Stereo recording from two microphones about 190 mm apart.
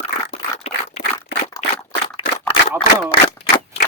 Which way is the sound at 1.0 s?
35° left (ahead or behind).